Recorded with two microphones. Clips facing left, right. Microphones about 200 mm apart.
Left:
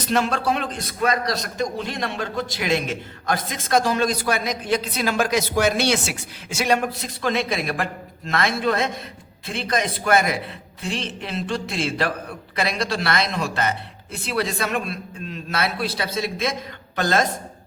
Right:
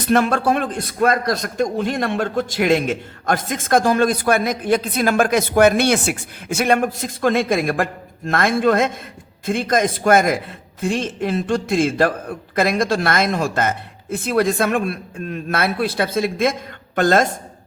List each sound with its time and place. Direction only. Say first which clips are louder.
0.0 s a man's voice: right 5 dB; 55° right (ahead or behind)